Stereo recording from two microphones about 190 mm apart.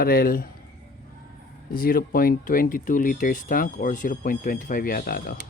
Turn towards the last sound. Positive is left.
turn(degrees=50)  # may be behind; listen again after turning